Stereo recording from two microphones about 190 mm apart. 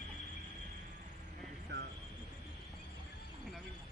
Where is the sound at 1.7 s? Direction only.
65° right (ahead or behind).